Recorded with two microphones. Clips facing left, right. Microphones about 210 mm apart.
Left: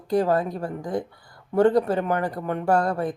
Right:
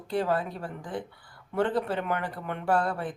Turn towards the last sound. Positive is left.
turn(degrees=40)  # may be behind; listen again after turning